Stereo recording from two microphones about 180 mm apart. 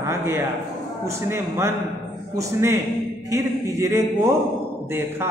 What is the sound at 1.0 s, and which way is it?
A man's voice, 15° right (ahead or behind).